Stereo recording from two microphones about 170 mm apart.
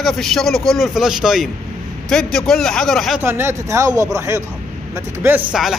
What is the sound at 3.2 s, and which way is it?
Speech, 15° right (ahead or behind).